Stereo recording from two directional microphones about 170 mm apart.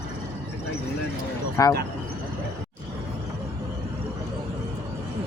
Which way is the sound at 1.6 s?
20° left (ahead or behind).